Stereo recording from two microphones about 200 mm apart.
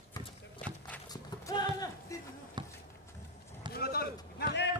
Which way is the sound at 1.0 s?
20° left (ahead or behind).